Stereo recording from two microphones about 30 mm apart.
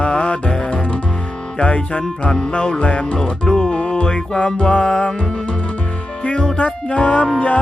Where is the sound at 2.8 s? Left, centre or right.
Left.